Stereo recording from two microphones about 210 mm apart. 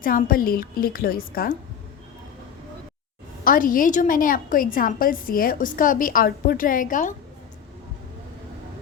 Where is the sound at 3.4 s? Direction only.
40° left (ahead or behind).